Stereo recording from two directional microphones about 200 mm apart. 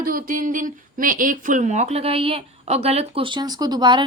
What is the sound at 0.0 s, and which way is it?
Speech, 45° right (ahead or behind).